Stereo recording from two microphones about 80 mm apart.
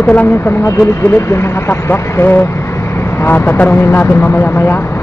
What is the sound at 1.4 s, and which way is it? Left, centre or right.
Speech, left.